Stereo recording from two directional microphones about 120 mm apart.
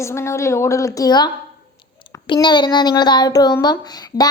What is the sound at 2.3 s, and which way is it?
A woman's voice, 40° left (ahead or behind).